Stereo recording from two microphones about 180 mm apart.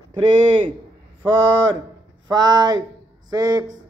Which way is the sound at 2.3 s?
20° right (ahead or behind).